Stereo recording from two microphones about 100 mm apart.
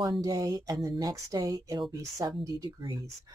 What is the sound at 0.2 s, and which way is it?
Speech, 35° right (ahead or behind).